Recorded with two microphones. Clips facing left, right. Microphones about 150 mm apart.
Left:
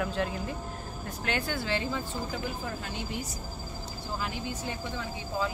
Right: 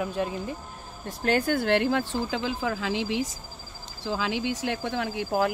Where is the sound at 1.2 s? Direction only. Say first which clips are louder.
Right 8 dB; 45° right (ahead or behind); by 5.5 s 70° right (ahead or behind).